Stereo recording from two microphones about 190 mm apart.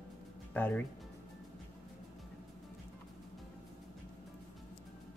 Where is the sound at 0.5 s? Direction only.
10° left (ahead or behind).